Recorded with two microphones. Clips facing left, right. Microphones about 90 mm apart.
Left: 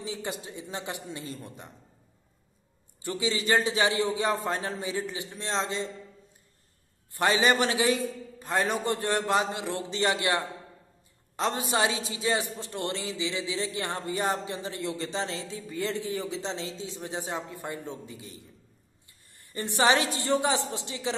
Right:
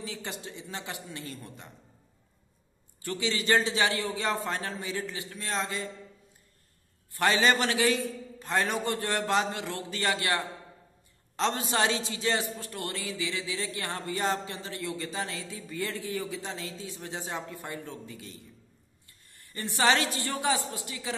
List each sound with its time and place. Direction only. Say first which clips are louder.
0.0 s speech: left 3 dB; 20° left (ahead or behind)
3.0 s speech: left 2 dB; 20° left (ahead or behind)
7.2 s a woman's voice: left 1 dB; 20° left (ahead or behind)
19.5 s speech: left 2 dB; 20° left (ahead or behind)